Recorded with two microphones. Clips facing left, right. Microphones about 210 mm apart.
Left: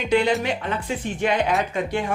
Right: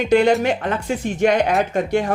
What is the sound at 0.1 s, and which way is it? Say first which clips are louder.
Speech: right 5 dB; 45° right (ahead or behind).